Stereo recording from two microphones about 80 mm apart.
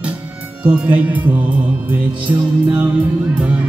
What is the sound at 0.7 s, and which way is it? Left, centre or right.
Music, centre.